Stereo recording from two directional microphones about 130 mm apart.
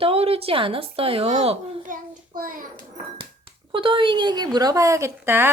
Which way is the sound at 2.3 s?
90° right.